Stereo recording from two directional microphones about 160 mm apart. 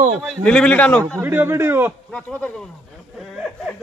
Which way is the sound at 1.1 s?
15° right (ahead or behind).